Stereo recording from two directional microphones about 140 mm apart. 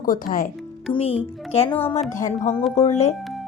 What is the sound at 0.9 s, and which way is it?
Speech, 40° left (ahead or behind).